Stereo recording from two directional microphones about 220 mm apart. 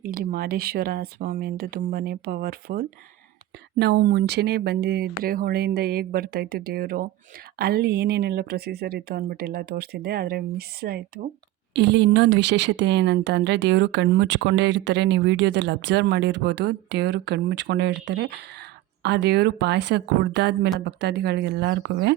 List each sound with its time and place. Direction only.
0.0 s speech: 40° right (ahead or behind)